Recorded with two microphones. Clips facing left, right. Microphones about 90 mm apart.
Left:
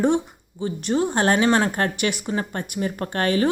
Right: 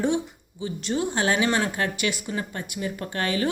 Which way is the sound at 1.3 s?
40° left (ahead or behind).